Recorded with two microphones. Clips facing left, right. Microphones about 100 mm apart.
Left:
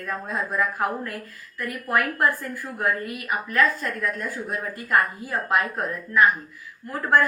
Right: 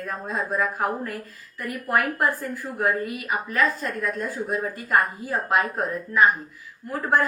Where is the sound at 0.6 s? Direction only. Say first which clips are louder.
Left 1 dB; 5° right (ahead or behind).